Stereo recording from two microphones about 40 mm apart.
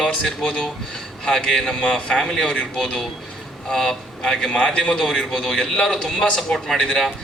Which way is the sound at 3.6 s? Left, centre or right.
Centre.